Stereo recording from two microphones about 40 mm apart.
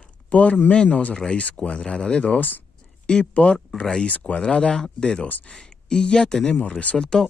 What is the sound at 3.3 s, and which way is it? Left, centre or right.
Speech, left.